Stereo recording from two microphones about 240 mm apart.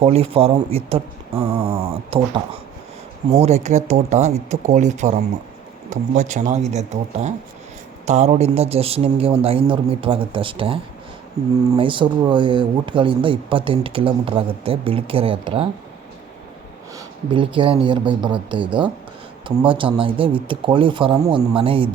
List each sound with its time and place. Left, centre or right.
0.0 s speech: right
17.3 s speech: right